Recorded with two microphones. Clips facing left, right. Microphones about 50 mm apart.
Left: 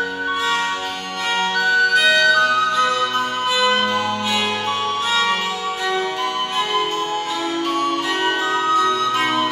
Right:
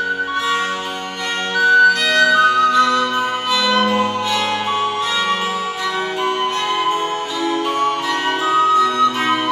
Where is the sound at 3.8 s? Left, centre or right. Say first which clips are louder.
Right 4 dB; right.